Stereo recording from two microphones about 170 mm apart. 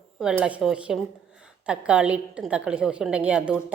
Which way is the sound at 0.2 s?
5° right (ahead or behind).